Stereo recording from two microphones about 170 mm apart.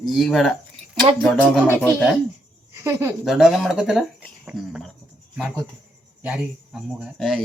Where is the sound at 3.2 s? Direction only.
Centre (ahead or behind).